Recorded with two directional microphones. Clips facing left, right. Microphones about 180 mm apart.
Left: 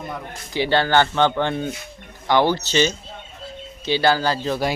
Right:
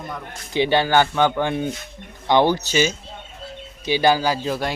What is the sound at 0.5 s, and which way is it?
Speech, 15° right (ahead or behind).